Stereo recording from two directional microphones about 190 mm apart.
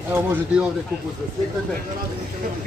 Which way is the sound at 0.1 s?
10° right (ahead or behind).